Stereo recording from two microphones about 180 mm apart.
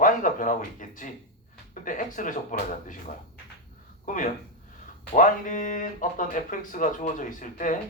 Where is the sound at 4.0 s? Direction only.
45° left (ahead or behind).